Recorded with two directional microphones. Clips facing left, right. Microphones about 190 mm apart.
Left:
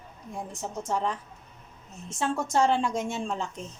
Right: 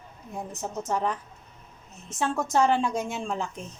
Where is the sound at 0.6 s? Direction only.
5° right (ahead or behind).